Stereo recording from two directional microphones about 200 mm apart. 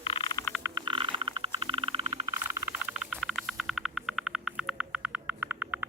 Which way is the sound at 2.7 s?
5° right (ahead or behind).